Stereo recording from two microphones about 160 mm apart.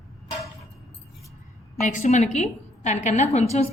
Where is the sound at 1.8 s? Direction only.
50° left (ahead or behind).